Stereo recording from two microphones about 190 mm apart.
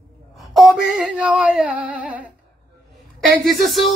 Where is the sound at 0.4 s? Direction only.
Centre (ahead or behind).